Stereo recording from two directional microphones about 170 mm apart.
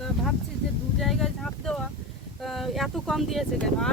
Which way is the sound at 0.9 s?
Centre (ahead or behind).